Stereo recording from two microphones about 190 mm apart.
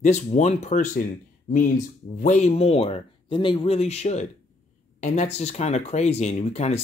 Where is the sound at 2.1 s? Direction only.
40° left (ahead or behind).